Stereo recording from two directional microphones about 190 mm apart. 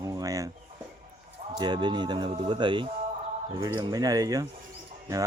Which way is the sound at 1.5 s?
25° right (ahead or behind).